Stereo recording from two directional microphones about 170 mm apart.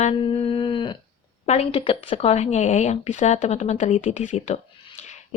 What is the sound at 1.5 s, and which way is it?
Speech, 35° left (ahead or behind).